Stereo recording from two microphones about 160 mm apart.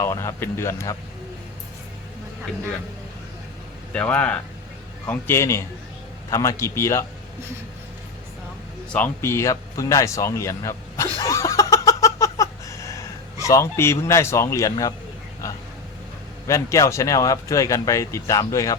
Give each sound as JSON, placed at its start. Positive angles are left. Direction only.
{"t": 0.0, "sound": "speech", "side_deg": 15}
{"t": 3.9, "sound": "speech", "side_deg": 10}
{"t": 8.9, "sound": "a sound", "side_deg": 15}
{"t": 13.4, "sound": "speech", "side_deg": 20}
{"t": 16.5, "sound": "speech", "side_deg": 20}